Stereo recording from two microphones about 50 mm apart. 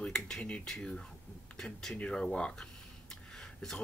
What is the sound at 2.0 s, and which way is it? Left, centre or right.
Speech, centre.